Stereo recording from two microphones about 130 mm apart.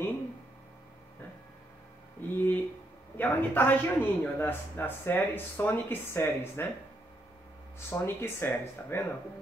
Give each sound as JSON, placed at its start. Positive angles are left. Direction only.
{"t": 2.3, "sound": "a sound", "side_deg": 15}
{"t": 3.2, "sound": "a man's voice", "side_deg": 15}
{"t": 7.9, "sound": "speech", "side_deg": 20}